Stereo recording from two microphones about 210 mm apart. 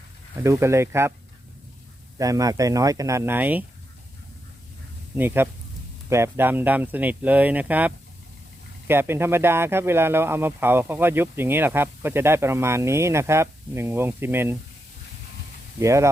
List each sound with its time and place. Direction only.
0.4 s speech: 15° right (ahead or behind)
2.1 s speech: 15° right (ahead or behind)
5.1 s speech: 10° right (ahead or behind)
15.8 s speech: 15° right (ahead or behind)